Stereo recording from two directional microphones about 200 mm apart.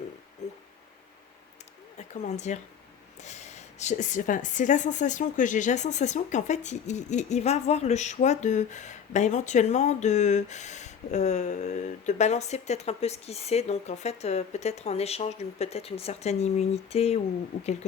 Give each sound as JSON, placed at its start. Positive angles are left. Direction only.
{"t": 2.0, "sound": "a woman's voice", "side_deg": 35}